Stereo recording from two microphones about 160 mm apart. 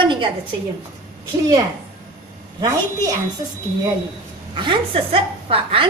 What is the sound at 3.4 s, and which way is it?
A woman's voice, 25° right (ahead or behind).